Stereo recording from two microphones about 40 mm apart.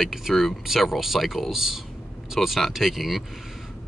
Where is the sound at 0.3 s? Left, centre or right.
Centre.